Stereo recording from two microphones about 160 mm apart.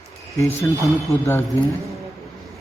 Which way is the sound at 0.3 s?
20° left (ahead or behind).